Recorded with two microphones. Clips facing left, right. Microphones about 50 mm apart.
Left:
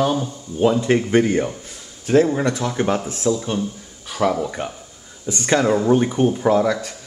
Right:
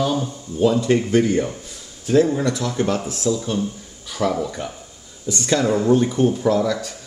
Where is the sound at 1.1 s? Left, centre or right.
Left.